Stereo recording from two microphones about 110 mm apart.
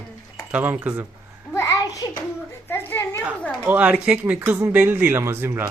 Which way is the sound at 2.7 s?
20° left (ahead or behind).